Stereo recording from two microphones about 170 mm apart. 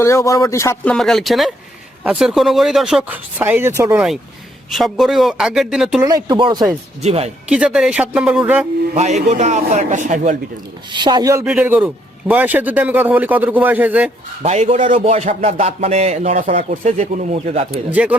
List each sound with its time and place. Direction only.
0.0 s speech: 15° left (ahead or behind)
0.9 s speech: centre (ahead or behind); by 4.0 s 15° right (ahead or behind)
4.7 s speech: centre (ahead or behind)
6.0 s speech: 20° right (ahead or behind)
7.0 s speech: 35° right (ahead or behind)
7.5 s speech: 5° right (ahead or behind)
9.0 s a man's voice: 40° right (ahead or behind)
10.9 s speech: 25° right (ahead or behind)
11.4 s speech: 10° right (ahead or behind)
14.4 s speech: 40° right (ahead or behind)
17.9 s speech: 10° right (ahead or behind)